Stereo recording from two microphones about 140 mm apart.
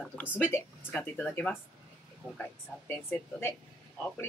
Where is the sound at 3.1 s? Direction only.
15° left (ahead or behind).